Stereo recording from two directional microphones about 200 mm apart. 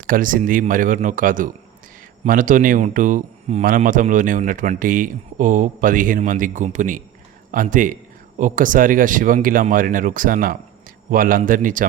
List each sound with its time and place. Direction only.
0.1 s a man's voice: 45° right (ahead or behind)